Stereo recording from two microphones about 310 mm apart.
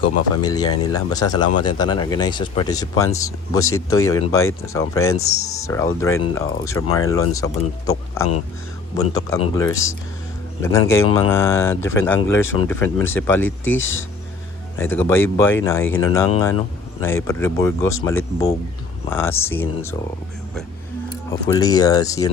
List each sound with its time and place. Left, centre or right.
0.0 s speech: centre
13.4 s speech: left
14.8 s speech: centre
19.0 s speech: centre
21.2 s speech: centre